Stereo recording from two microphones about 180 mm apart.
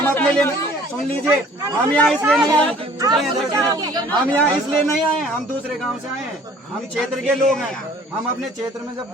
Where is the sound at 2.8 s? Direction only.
20° right (ahead or behind).